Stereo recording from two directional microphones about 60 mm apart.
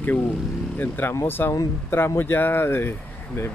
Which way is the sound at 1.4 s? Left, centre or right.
Left.